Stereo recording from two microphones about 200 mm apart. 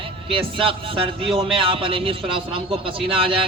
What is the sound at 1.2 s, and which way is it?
A man's voice, 30° right (ahead or behind).